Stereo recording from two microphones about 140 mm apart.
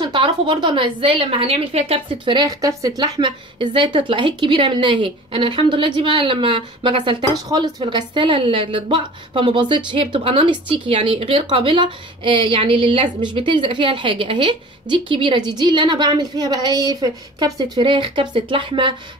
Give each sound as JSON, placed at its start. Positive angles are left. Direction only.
{"t": 0.0, "sound": "a woman's voice", "side_deg": -35}